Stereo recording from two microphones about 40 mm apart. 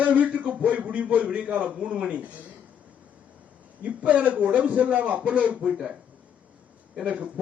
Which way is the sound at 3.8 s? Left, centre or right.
Right.